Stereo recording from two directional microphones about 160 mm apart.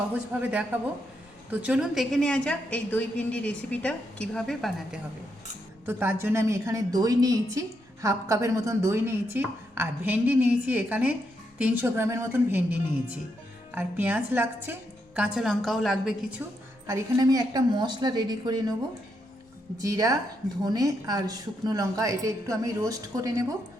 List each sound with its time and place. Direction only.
0.1 s a woman's voice: 10° right (ahead or behind)
5.8 s a woman's voice: 15° right (ahead or behind)
13.7 s speech: 10° right (ahead or behind)
16.8 s a woman's voice: 20° right (ahead or behind)
19.8 s a woman's voice: 20° right (ahead or behind)